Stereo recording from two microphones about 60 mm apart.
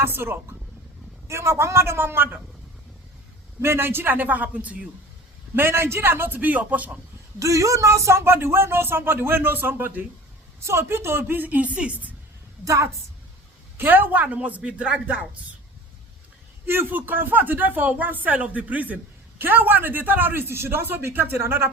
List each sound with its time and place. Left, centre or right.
0.0 s a man's voice: right
3.6 s speech: right
5.5 s speech: right
7.3 s speech: right
10.6 s a man's voice: right
11.4 s speech: right
12.6 s a woman's voice: right
13.7 s speech: right
16.6 s speech: right